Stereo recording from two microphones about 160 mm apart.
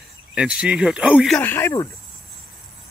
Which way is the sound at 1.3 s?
15° left (ahead or behind).